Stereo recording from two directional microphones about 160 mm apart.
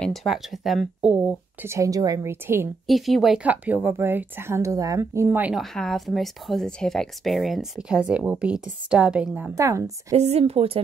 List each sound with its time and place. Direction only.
0.0 s speech: centre (ahead or behind); by 2.7 s 15° right (ahead or behind)
2.9 s speech: centre (ahead or behind); by 5.5 s 15° right (ahead or behind)
5.5 s speech: centre (ahead or behind)
9.6 s a woman's voice: 20° right (ahead or behind)
10.1 s speech: 40° right (ahead or behind)